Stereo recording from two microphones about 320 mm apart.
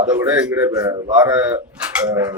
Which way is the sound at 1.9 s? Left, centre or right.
Centre.